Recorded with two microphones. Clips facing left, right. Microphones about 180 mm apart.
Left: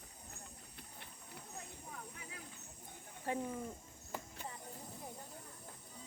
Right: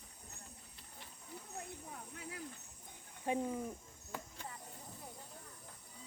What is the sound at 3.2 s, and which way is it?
Speech, 15° right (ahead or behind).